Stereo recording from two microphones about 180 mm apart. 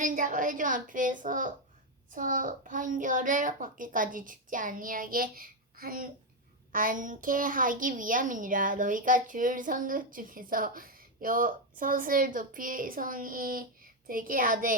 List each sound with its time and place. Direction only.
0.0 s a woman's voice: 50° right (ahead or behind)